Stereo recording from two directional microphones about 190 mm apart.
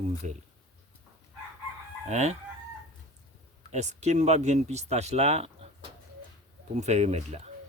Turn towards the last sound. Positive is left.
turn(degrees=-35)  # may be behind; listen again after turning